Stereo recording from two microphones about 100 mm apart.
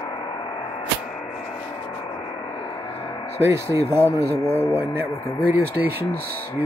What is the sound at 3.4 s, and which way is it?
Speech, 30° right (ahead or behind).